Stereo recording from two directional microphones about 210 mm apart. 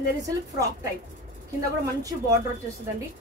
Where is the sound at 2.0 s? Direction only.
15° right (ahead or behind).